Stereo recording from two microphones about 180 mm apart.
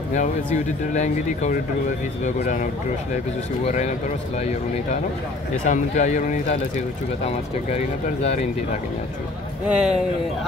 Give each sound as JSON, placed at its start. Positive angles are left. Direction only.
{"t": 0.9, "sound": "speech", "side_deg": 40}
{"t": 3.6, "sound": "speech", "side_deg": 40}
{"t": 5.7, "sound": "speech", "side_deg": 40}
{"t": 7.7, "sound": "speech", "side_deg": 35}
{"t": 9.7, "sound": "speech", "side_deg": -5}